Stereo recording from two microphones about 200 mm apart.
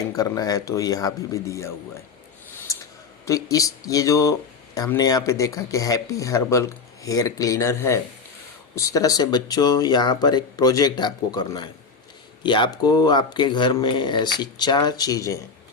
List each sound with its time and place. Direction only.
0.1 s speech: 15° left (ahead or behind)
3.2 s speech: 15° left (ahead or behind)